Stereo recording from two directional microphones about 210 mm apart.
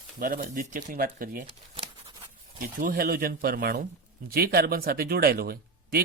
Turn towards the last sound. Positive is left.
turn(degrees=-45)  # may be behind; listen again after turning